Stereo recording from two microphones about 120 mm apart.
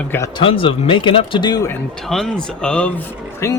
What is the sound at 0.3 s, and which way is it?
Speech, 50° left (ahead or behind).